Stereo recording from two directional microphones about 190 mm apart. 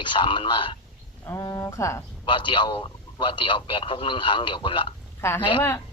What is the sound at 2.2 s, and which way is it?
A man's voice, 25° left (ahead or behind).